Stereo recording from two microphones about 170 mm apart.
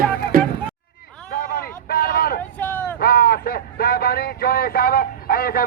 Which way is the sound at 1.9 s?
60° left (ahead or behind).